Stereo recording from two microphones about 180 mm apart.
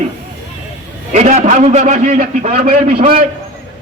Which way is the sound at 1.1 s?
40° right (ahead or behind).